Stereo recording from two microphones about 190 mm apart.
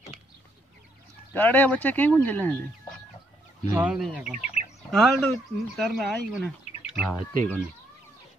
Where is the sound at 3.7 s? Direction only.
5° right (ahead or behind).